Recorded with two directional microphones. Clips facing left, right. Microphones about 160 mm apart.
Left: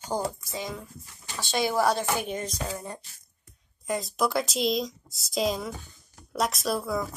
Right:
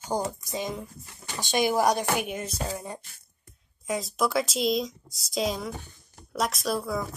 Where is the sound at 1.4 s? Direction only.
20° right (ahead or behind).